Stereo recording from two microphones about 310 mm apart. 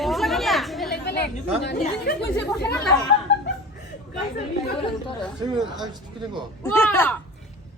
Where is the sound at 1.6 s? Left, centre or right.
Left.